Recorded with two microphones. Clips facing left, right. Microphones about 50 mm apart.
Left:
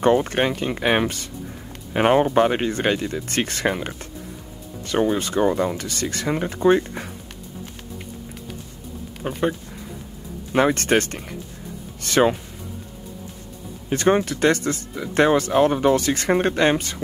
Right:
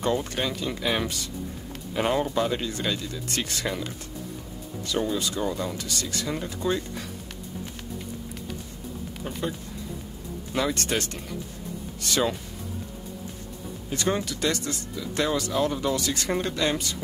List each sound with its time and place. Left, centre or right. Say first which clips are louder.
0.0 s speech: left 8 dB; left
9.2 s speech: left 8 dB; left
10.5 s speech: left 8 dB; left
13.8 s speech: left 8 dB; left